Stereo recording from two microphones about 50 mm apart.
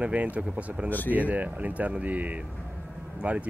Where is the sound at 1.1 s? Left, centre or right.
Right.